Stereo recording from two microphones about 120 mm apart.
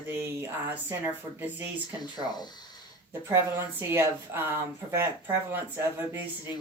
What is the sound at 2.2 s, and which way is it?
Speech, 35° left (ahead or behind).